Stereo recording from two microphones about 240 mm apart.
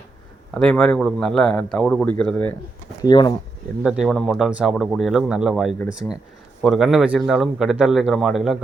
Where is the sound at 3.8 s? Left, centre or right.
Centre.